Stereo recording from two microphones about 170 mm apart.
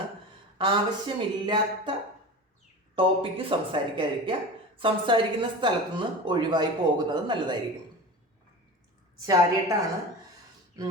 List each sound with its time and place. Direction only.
0.6 s speech: 30° right (ahead or behind)
2.9 s speech: 30° right (ahead or behind)
9.2 s speech: 20° right (ahead or behind)